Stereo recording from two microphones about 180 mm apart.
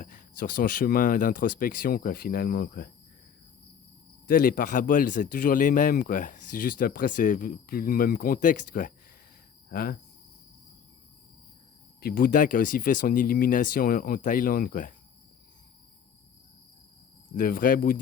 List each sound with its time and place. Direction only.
0.0 s speech: 50° left (ahead or behind)
4.3 s speech: 50° left (ahead or behind)
9.7 s cricket: 55° left (ahead or behind)
11.9 s speech: 55° left (ahead or behind)
17.3 s speech: 55° left (ahead or behind)